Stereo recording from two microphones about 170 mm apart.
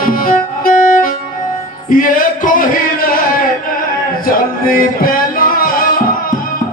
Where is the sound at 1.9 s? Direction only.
55° left (ahead or behind).